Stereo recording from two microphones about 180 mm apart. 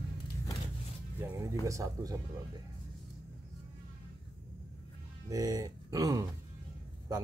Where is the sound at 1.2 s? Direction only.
15° right (ahead or behind).